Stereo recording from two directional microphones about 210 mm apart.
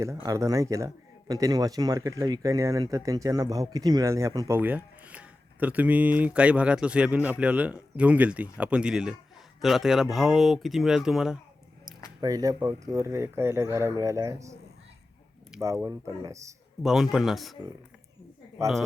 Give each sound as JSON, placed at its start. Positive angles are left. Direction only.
{"t": 0.0, "sound": "speech", "side_deg": -15}
{"t": 12.2, "sound": "speech", "side_deg": -15}
{"t": 15.6, "sound": "speech", "side_deg": -15}
{"t": 16.8, "sound": "speech", "side_deg": 0}